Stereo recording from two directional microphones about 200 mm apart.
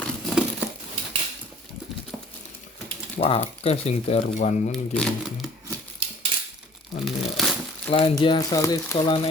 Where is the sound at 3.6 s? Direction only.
30° left (ahead or behind).